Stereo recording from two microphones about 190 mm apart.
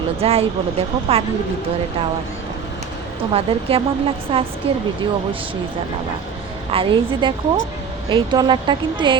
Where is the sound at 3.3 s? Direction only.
30° right (ahead or behind).